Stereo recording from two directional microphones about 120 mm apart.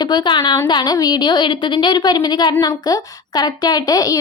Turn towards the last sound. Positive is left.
turn(degrees=30)  # may be behind; listen again after turning